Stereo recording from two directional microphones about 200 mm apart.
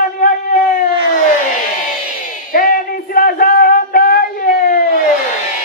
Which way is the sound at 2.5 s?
45° left (ahead or behind).